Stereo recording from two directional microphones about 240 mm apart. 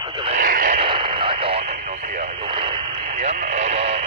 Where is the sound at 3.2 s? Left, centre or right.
Right.